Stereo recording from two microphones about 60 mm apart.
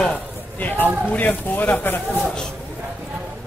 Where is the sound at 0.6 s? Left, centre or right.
Left.